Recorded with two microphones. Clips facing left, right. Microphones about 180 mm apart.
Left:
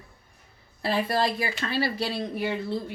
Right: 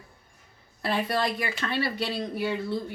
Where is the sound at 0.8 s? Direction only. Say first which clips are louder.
Left 2 dB; 30° left (ahead or behind).